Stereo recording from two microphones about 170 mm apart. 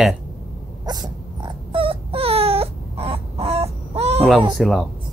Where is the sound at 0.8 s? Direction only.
25° right (ahead or behind).